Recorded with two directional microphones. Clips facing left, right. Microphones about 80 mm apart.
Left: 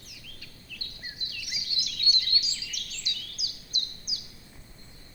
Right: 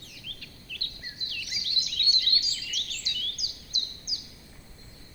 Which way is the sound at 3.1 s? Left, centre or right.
Right.